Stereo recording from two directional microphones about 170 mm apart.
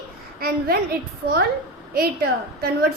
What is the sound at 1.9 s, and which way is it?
Speech, 60° right (ahead or behind).